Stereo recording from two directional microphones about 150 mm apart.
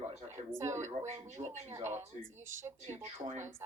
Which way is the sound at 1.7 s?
15° right (ahead or behind).